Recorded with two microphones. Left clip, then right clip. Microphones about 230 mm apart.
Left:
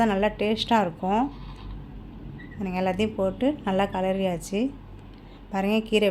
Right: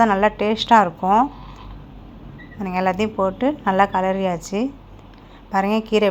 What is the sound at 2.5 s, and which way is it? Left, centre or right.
A woman's voice, centre.